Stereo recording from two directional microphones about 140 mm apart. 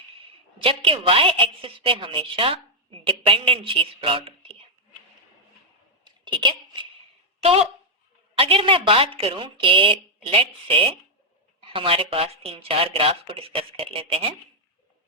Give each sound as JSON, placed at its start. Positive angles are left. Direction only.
{"t": 0.6, "sound": "a woman's voice", "side_deg": -40}
{"t": 6.1, "sound": "a sound", "side_deg": -35}
{"t": 8.4, "sound": "a woman's voice", "side_deg": -40}